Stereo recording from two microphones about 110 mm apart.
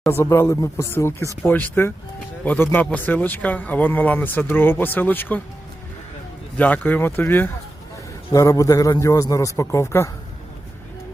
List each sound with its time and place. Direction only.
0.1 s a man's voice: 20° left (ahead or behind)
6.6 s a man's voice: 15° left (ahead or behind)
8.3 s a man's voice: 30° left (ahead or behind)